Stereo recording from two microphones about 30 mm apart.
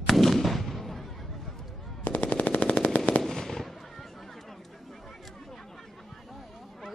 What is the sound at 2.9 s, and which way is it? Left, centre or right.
Machine gun, left.